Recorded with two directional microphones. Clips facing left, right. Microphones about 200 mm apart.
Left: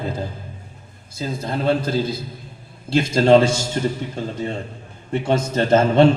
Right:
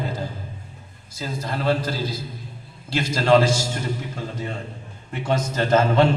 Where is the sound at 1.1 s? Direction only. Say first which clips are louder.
Left 4 dB; 25° left (ahead or behind).